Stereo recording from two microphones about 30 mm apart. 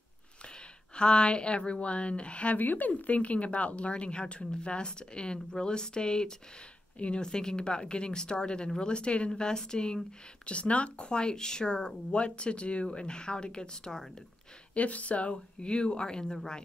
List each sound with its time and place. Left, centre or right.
0.9 s speech: left
2.5 s speech: left
3.0 s a woman's voice: left
9.3 s speech: left
10.4 s a woman's voice: left
11.0 s speech: left
14.7 s speech: left